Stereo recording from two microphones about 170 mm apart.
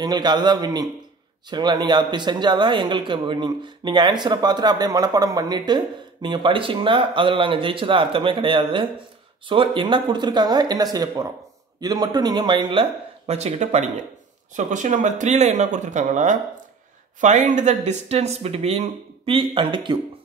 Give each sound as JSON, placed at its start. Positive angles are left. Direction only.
{"t": 0.0, "sound": "speech", "side_deg": -25}
{"t": 13.3, "sound": "speech", "side_deg": -40}